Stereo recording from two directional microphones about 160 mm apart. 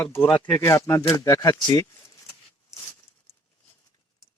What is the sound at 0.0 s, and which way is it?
Speech, 10° left (ahead or behind).